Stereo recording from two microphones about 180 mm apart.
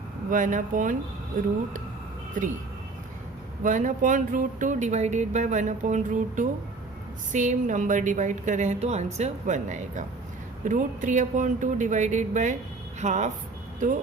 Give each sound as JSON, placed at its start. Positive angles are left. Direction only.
{"t": 0.3, "sound": "speech", "side_deg": -45}
{"t": 3.6, "sound": "speech", "side_deg": -45}